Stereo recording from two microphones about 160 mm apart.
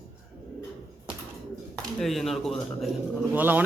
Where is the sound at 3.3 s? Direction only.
10° right (ahead or behind).